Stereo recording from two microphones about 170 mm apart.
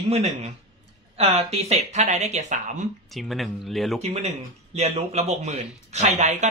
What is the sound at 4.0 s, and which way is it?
Speech, 40° right (ahead or behind).